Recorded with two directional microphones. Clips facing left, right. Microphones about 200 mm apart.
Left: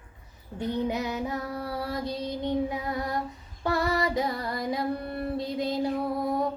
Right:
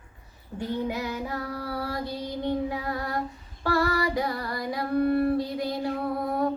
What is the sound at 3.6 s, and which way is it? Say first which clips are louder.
Female singing: right 1 dB; 20° left (ahead or behind).